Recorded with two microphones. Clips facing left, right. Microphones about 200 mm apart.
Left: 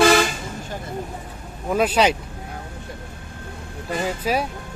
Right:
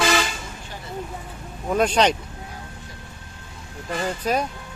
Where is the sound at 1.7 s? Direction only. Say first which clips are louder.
Left 1 dB; 5° left (ahead or behind).